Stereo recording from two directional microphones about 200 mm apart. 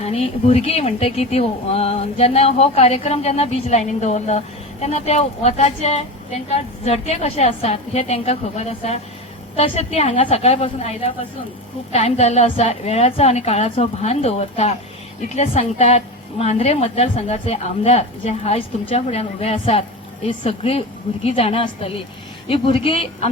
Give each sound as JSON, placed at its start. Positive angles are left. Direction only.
{"t": 0.0, "sound": "speech", "side_deg": 30}